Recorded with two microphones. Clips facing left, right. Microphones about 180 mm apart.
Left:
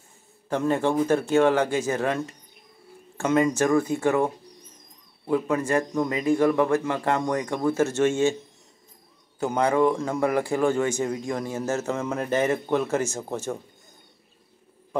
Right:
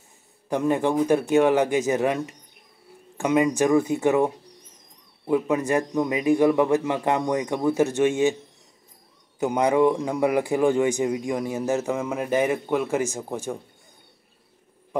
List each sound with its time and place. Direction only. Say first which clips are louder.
0.5 s a man's voice: right 1 dB; 15° right (ahead or behind)
9.4 s a man's voice: right 2 dB; 15° right (ahead or behind)